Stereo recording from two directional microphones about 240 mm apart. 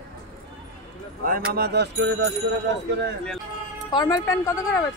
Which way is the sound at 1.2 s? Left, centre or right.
Right.